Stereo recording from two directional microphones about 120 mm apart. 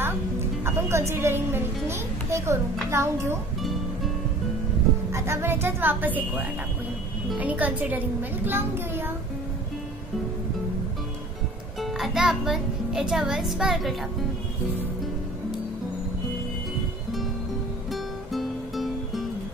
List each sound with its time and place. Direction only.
0.7 s a woman's voice: 25° right (ahead or behind)
5.1 s a woman's voice: 20° right (ahead or behind)
11.8 s a child's voice: centre (ahead or behind)
17.9 s music: centre (ahead or behind)